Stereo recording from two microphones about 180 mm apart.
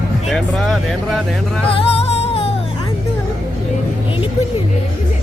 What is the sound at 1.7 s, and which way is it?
Music, 35° left (ahead or behind).